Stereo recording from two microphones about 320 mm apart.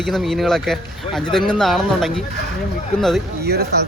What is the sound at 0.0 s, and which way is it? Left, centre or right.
Speech, centre.